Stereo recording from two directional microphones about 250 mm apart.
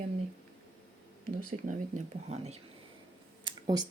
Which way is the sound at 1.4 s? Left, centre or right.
Right.